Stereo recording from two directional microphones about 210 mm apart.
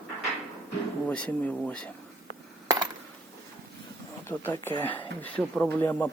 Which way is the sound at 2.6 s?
15° right (ahead or behind).